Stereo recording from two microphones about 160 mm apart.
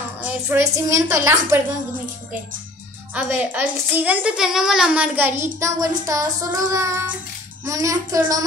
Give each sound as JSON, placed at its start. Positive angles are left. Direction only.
{"t": 0.2, "sound": "a woman's voice", "side_deg": -20}
{"t": 3.2, "sound": "a woman's voice", "side_deg": -10}